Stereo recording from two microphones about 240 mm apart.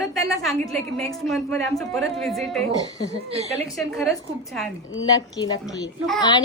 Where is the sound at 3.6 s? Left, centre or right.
Centre.